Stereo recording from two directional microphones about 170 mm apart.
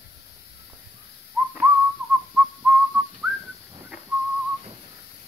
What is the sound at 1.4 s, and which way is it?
Whistling, 5° right (ahead or behind).